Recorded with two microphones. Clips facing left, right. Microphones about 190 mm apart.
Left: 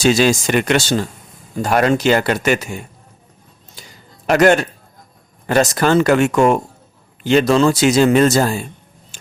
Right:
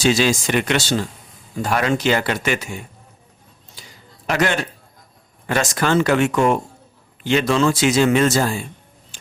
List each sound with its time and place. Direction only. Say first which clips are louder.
0.0 s speech: left 3 dB; 45° left (ahead or behind)
4.3 s speech: left 8 dB; 45° left (ahead or behind)